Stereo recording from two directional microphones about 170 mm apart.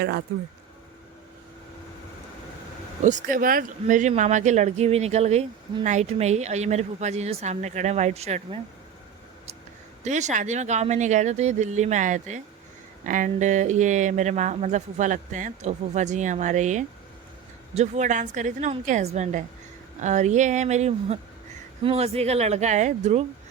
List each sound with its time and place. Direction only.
3.0 s speech: 50° right (ahead or behind)
10.0 s speech: 45° right (ahead or behind)